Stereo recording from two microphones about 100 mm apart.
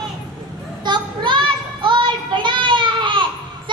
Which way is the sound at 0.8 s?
50° right (ahead or behind).